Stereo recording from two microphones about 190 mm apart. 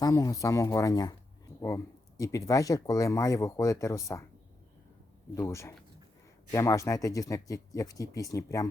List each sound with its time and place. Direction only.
0.0 s speech: 20° left (ahead or behind)
5.3 s speech: 15° left (ahead or behind)